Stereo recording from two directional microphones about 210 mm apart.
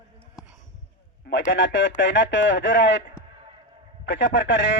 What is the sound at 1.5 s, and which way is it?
A man's voice, 60° left (ahead or behind).